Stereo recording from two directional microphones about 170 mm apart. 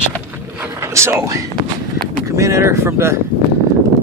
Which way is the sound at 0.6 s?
15° right (ahead or behind).